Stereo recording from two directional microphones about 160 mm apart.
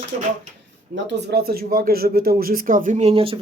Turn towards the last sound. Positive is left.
turn(degrees=-35)  # may be behind; listen again after turning